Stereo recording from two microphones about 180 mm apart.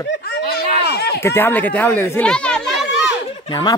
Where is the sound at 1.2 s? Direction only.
10° left (ahead or behind).